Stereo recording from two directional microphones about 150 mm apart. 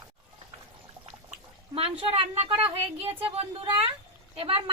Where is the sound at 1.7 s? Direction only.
40° right (ahead or behind).